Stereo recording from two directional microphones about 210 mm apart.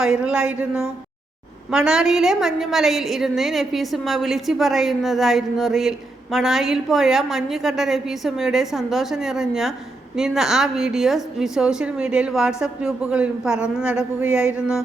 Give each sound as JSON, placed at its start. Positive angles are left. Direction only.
{"t": 0.0, "sound": "a woman's voice", "side_deg": -5}